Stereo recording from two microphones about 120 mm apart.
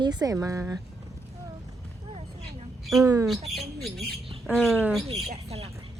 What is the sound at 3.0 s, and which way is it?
Speech, 30° right (ahead or behind).